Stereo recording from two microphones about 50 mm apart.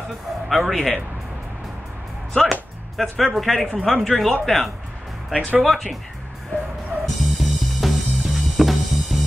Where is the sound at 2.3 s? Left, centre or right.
Centre.